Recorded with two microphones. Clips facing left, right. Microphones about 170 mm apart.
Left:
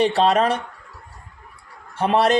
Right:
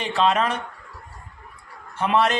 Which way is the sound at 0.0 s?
40° left (ahead or behind).